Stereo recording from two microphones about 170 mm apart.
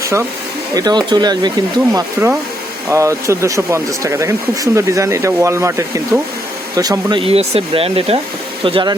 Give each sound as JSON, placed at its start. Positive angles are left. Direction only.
{"t": 0.0, "sound": "speech", "side_deg": -15}